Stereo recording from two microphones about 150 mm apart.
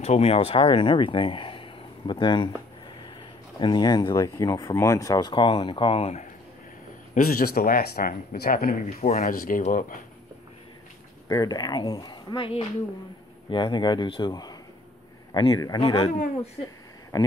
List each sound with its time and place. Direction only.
0.0 s speech: 45° left (ahead or behind)
3.5 s speech: 30° left (ahead or behind)
7.2 s speech: 75° left (ahead or behind)
11.2 s speech: 25° left (ahead or behind)
17.1 s speech: 25° left (ahead or behind)